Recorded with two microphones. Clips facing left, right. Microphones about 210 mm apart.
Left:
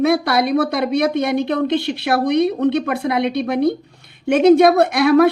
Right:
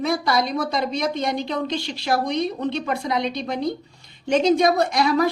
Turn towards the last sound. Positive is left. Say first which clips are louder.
# left 7 dB
turn(degrees=60)  # may be behind; listen again after turning